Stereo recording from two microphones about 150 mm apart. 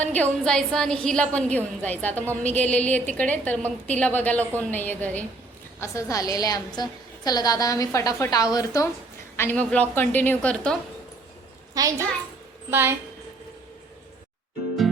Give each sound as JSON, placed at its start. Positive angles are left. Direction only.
{"t": 0.0, "sound": "a woman's voice", "side_deg": 10}
{"t": 11.7, "sound": "a child's voice", "side_deg": -20}